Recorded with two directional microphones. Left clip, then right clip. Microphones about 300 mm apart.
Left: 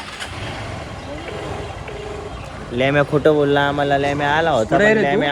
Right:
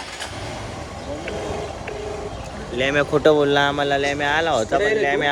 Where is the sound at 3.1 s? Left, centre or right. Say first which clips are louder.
Right 2 dB; centre.